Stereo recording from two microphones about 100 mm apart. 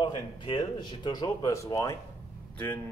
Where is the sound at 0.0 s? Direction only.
50° left (ahead or behind).